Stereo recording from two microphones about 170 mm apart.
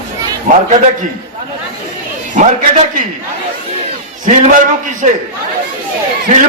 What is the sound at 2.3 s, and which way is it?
Speech, 50° right (ahead or behind).